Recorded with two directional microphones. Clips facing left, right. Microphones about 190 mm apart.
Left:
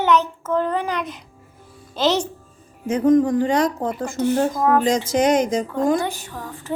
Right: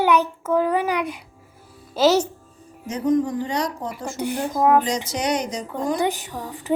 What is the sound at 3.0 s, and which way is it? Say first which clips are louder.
Speech: left 5 dB; 90° left.